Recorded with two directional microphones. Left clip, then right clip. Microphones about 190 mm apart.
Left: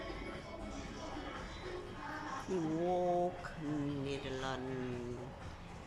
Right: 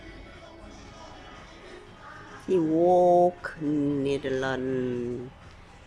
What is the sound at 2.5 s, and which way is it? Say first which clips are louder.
Speech: right 15 dB; 45° right (ahead or behind).